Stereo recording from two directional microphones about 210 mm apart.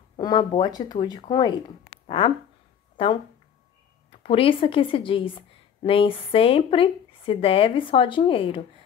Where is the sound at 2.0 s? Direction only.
30° left (ahead or behind).